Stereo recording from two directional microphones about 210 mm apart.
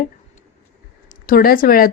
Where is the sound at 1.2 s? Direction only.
45° left (ahead or behind).